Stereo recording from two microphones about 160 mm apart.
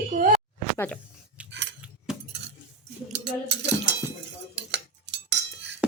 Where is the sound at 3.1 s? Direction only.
90° right.